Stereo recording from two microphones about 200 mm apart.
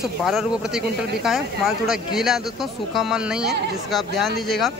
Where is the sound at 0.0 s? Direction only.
Centre (ahead or behind).